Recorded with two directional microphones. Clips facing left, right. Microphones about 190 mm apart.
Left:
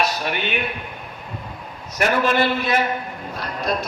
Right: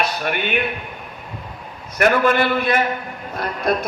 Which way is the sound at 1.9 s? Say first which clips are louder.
Right 3 dB; 55° right (ahead or behind).